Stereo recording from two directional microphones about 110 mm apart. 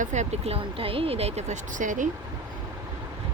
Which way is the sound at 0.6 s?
55° right (ahead or behind).